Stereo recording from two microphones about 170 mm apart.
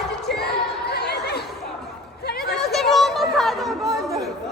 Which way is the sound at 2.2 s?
65° left (ahead or behind).